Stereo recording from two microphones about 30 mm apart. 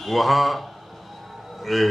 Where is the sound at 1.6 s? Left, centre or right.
Centre.